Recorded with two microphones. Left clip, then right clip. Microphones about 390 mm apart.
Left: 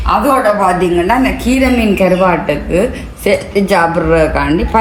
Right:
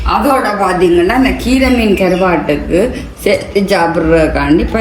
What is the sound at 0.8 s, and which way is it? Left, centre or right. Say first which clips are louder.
A woman's voice: right 2 dB; centre.